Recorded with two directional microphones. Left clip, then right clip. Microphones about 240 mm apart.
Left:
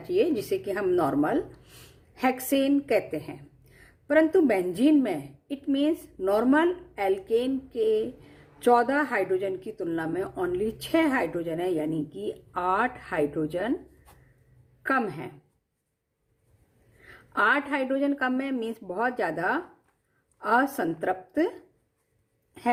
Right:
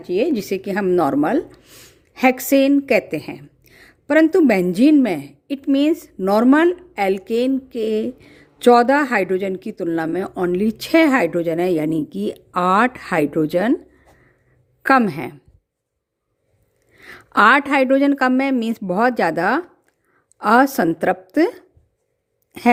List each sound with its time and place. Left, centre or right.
0.0 s speech: right
14.8 s a woman's voice: right
17.0 s a woman's voice: right